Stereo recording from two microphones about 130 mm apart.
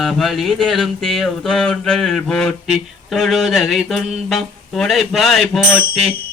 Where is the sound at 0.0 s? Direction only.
Centre (ahead or behind).